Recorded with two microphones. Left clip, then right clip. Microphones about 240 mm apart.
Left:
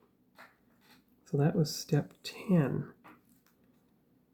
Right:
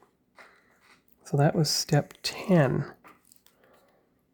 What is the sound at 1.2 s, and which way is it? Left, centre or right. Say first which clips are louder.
Speech: right 6 dB; right.